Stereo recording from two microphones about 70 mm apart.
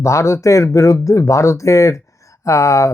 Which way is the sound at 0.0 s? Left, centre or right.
Left.